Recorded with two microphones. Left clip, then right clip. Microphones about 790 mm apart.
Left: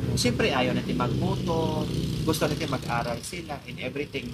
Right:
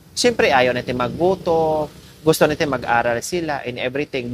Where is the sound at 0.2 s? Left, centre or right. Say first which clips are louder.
Right 10 dB; right.